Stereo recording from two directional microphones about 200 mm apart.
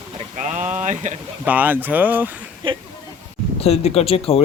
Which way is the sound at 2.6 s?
25° right (ahead or behind).